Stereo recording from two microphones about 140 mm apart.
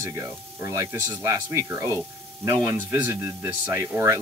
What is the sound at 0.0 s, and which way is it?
Speech, 20° right (ahead or behind).